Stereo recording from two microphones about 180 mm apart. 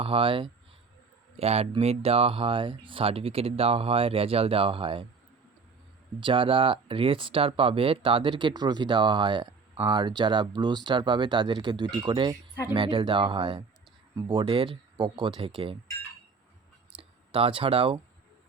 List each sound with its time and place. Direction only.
0.0 s speech: 30° right (ahead or behind)
6.1 s speech: 25° right (ahead or behind)
16.9 s clicking: 5° right (ahead or behind)
17.3 s speech: 30° right (ahead or behind)